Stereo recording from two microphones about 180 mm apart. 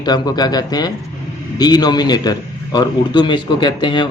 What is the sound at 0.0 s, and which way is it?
A man's voice, 25° left (ahead or behind).